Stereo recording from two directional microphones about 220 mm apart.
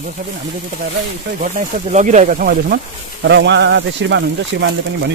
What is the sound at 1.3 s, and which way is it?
Speech, 35° right (ahead or behind).